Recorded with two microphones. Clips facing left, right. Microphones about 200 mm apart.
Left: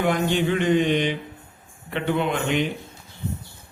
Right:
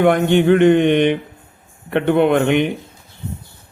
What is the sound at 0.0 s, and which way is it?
A man's voice, 60° right (ahead or behind).